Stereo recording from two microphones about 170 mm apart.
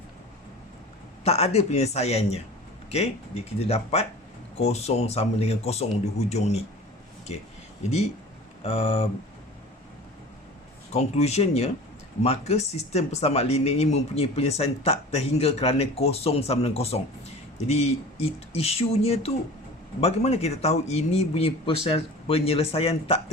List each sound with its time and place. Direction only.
1.2 s speech: 40° left (ahead or behind)
10.9 s speech: 40° left (ahead or behind)